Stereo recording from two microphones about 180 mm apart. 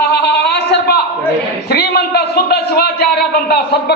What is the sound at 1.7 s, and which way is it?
A man's voice, 60° left (ahead or behind).